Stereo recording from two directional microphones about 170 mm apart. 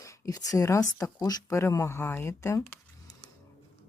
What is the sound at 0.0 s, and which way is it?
Speech, 20° left (ahead or behind).